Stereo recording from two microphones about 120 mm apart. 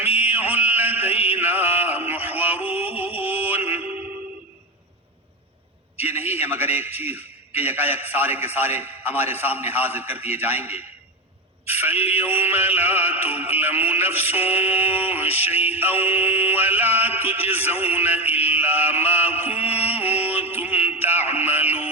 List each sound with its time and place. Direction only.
0.3 s a sound: 15° right (ahead or behind)
2.6 s music: 15° right (ahead or behind)
6.0 s a man's voice: 15° right (ahead or behind)
19.4 s music: 15° right (ahead or behind)